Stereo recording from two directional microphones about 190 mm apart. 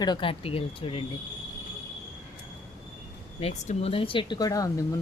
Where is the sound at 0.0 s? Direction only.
25° left (ahead or behind).